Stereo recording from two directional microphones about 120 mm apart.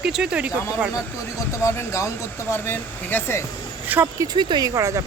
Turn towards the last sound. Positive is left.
turn(degrees=-25)  # may be behind; listen again after turning